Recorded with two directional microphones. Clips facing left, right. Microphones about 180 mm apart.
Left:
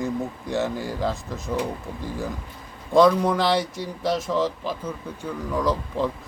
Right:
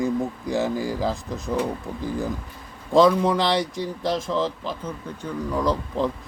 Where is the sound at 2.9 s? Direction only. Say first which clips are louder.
Even; centre (ahead or behind).